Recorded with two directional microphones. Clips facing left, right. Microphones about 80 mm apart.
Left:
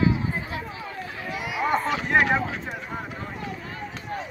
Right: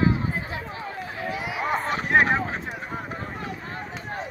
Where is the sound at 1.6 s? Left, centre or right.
Centre.